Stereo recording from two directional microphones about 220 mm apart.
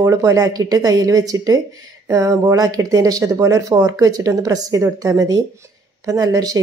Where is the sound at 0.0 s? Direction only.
15° right (ahead or behind).